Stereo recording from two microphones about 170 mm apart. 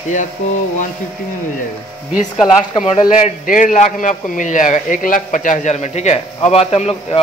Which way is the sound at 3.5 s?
50° left (ahead or behind).